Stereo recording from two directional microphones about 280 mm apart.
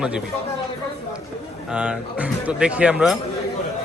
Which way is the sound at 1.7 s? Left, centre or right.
Centre.